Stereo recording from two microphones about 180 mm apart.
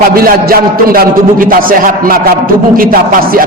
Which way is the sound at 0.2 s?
55° right (ahead or behind).